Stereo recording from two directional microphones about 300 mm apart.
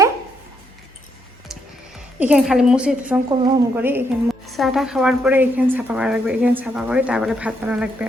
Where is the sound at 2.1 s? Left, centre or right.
Centre.